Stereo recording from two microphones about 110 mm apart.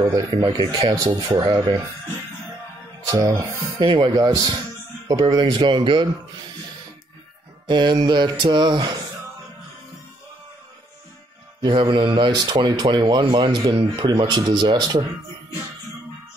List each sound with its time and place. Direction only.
0.0 s speech: 35° right (ahead or behind)
0.4 s mantra: 45° right (ahead or behind)
3.3 s mantra: 45° right (ahead or behind)
4.1 s speech: 35° right (ahead or behind)
5.0 s mantra: 40° right (ahead or behind)
7.6 s mantra: 40° right (ahead or behind)
11.6 s mantra: 45° right (ahead or behind)
12.9 s speech: 40° right (ahead or behind)